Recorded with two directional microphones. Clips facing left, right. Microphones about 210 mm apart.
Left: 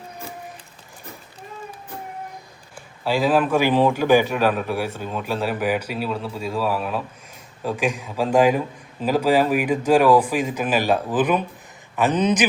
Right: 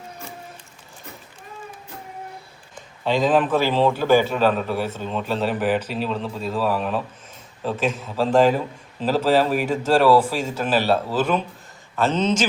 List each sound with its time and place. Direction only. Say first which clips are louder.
2.7 s a man's voice: right 1 dB; 10° left (ahead or behind)